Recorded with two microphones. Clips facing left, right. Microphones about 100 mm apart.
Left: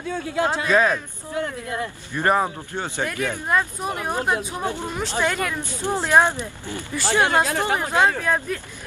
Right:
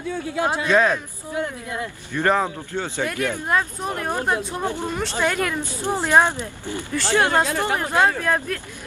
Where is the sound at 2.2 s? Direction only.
15° left (ahead or behind).